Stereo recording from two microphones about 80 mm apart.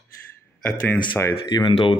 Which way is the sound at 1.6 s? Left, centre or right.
Left.